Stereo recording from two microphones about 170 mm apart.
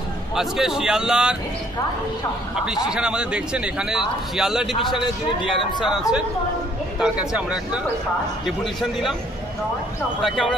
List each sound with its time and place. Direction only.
0.4 s speech: centre (ahead or behind)
2.5 s speech: 5° right (ahead or behind)
5.4 s speech: 30° left (ahead or behind)
7.0 s speech: 5° right (ahead or behind)
10.2 s speech: centre (ahead or behind)